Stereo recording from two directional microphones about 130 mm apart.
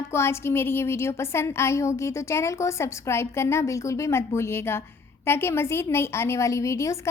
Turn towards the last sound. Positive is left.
turn(degrees=25)  # may be behind; listen again after turning